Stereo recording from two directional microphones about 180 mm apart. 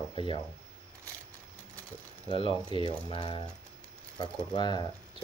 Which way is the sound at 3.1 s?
30° left (ahead or behind).